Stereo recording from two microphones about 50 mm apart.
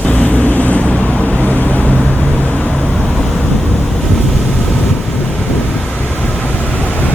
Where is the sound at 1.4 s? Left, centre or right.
Left.